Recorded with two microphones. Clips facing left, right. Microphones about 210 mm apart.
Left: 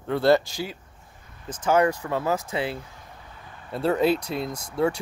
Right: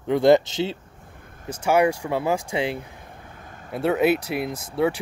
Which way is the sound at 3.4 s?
45° right (ahead or behind).